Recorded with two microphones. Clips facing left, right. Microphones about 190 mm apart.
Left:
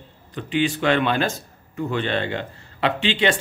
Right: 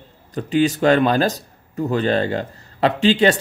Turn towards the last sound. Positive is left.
turn(degrees=-40)  # may be behind; listen again after turning